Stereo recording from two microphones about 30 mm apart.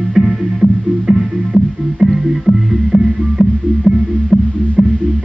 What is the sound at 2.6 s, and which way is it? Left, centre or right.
Music, centre.